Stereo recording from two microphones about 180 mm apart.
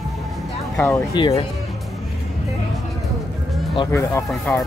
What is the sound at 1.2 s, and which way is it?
Speech, 25° left (ahead or behind).